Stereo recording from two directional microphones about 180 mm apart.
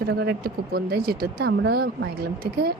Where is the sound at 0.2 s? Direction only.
60° right (ahead or behind).